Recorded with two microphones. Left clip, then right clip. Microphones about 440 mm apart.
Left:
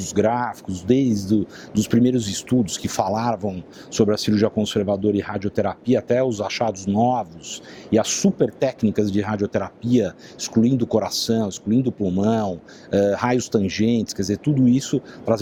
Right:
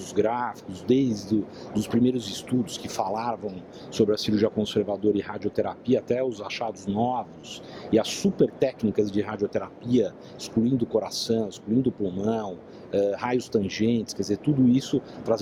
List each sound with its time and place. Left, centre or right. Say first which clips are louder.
0.0 s speech: left 5 dB; left